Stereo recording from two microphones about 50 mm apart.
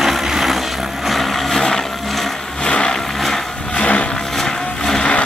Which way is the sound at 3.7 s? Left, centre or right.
Left.